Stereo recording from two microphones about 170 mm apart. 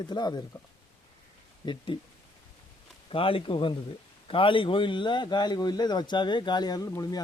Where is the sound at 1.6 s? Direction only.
30° left (ahead or behind).